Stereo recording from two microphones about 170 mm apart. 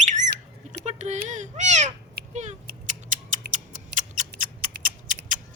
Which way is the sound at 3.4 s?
70° right (ahead or behind).